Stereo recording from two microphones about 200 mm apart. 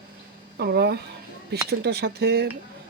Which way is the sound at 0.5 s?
55° right (ahead or behind).